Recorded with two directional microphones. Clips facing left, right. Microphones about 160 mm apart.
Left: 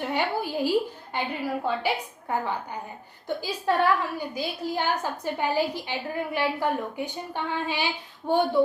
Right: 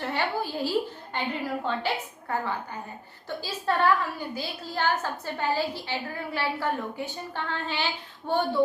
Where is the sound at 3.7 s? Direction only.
15° left (ahead or behind).